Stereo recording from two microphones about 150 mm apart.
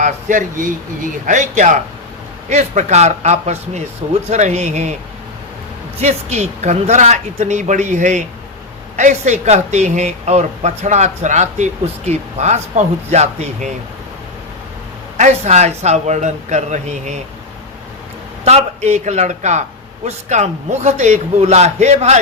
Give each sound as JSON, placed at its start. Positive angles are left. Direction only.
{"t": 0.0, "sound": "speech", "side_deg": -60}
{"t": 6.0, "sound": "speech", "side_deg": -45}
{"t": 15.2, "sound": "speech", "side_deg": -50}
{"t": 18.4, "sound": "speech", "side_deg": -45}